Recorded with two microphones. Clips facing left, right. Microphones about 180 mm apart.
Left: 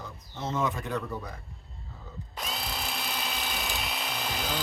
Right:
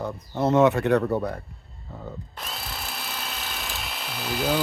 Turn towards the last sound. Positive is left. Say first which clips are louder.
# right 8 dB
turn(degrees=-5)  # may be behind; listen again after turning